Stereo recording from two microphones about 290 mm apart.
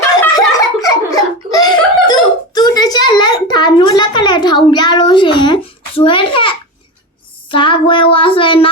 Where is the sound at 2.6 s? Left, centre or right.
Centre.